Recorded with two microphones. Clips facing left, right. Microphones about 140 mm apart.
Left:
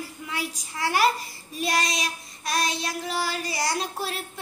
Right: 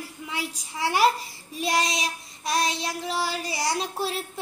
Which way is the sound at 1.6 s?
25° right (ahead or behind).